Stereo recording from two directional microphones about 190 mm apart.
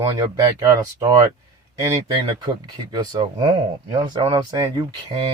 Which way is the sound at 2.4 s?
25° right (ahead or behind).